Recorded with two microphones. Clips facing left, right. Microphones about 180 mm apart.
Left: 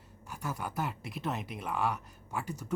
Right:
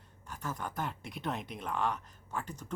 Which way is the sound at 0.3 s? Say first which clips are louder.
Left 1 dB; 10° left (ahead or behind).